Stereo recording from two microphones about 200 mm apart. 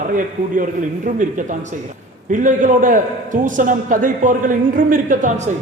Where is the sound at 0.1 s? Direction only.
40° right (ahead or behind).